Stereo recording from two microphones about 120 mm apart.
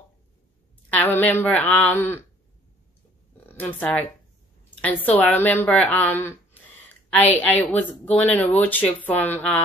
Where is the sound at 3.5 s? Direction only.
15° left (ahead or behind).